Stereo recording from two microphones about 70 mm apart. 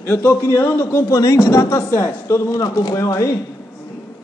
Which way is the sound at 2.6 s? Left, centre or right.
Left.